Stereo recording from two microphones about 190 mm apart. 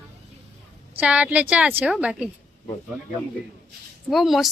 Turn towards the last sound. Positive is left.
turn(degrees=0)  # may be behind; listen again after turning